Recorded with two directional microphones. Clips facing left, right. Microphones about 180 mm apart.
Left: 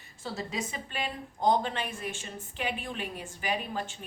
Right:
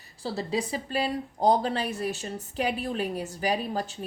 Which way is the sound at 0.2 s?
30° right (ahead or behind).